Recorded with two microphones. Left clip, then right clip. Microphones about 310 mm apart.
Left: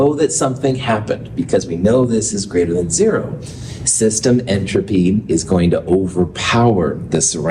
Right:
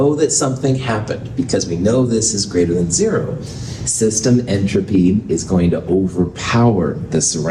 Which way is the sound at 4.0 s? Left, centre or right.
Left.